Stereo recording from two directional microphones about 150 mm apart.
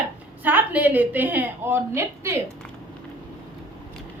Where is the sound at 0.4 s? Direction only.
10° right (ahead or behind).